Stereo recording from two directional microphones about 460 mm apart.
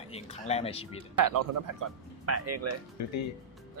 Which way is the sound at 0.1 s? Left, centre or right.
Centre.